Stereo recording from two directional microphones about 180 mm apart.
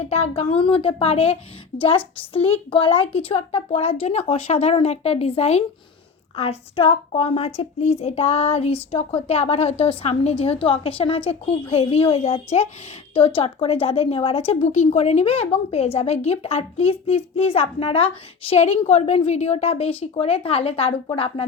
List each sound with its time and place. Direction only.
0.1 s a woman's voice: 35° left (ahead or behind)